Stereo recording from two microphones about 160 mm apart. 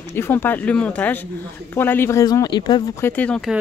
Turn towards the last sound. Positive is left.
turn(degrees=5)  # may be behind; listen again after turning